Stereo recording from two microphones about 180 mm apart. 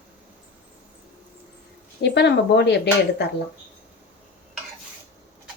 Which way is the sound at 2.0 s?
70° left (ahead or behind).